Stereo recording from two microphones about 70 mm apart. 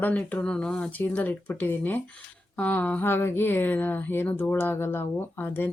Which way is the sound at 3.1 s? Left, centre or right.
Left.